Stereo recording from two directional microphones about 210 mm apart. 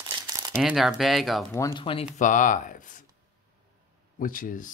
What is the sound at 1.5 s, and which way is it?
Speech, 15° left (ahead or behind).